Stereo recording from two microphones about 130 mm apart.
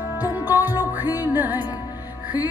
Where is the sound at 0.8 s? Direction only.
30° left (ahead or behind).